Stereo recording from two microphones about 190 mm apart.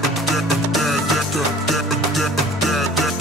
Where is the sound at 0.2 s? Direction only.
Centre (ahead or behind).